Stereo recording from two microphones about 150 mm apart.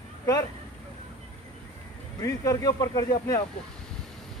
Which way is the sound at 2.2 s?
20° left (ahead or behind).